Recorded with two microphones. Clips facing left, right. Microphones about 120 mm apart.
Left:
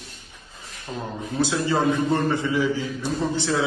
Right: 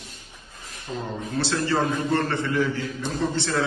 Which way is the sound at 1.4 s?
15° left (ahead or behind).